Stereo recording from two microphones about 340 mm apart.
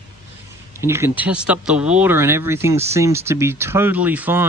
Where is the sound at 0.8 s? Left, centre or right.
Centre.